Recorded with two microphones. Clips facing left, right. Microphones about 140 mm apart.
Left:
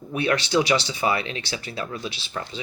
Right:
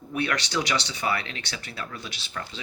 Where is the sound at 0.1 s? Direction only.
20° left (ahead or behind).